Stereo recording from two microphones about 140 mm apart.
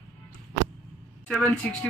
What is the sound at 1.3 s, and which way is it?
Speech, 5° left (ahead or behind).